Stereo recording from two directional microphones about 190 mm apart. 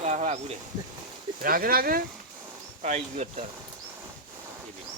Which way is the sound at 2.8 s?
40° right (ahead or behind).